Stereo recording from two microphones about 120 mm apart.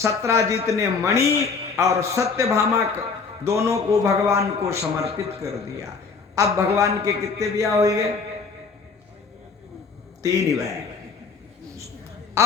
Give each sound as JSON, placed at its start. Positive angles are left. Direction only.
{"t": 0.0, "sound": "a man's voice", "side_deg": -25}
{"t": 10.2, "sound": "a man's voice", "side_deg": -30}
{"t": 12.4, "sound": "a sound", "side_deg": -20}